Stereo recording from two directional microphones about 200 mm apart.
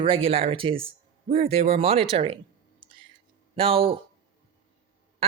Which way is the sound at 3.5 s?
25° right (ahead or behind).